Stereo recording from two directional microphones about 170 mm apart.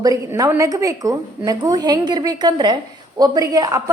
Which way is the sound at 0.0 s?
20° right (ahead or behind).